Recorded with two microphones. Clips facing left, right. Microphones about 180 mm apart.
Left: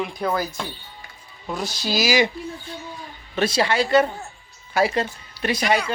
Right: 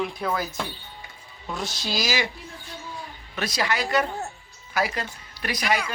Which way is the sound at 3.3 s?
30° left (ahead or behind).